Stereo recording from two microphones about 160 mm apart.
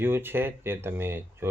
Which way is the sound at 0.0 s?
15° right (ahead or behind).